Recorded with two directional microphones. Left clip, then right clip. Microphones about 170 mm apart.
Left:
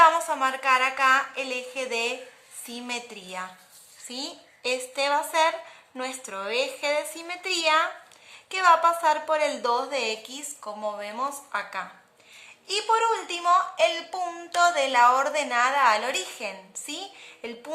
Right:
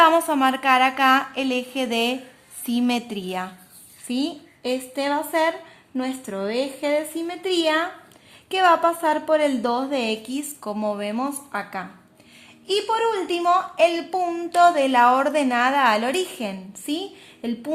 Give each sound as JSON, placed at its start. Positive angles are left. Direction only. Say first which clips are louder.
{"t": 0.0, "sound": "a woman's voice", "louder": "right 3 dB", "side_deg": -40}
{"t": 4.7, "sound": "a woman's voice", "louder": "right 1 dB", "side_deg": -20}
{"t": 8.4, "sound": "a woman's voice", "louder": "right 2 dB", "side_deg": -35}
{"t": 10.0, "sound": "a woman's voice", "louder": "right 4 dB", "side_deg": -35}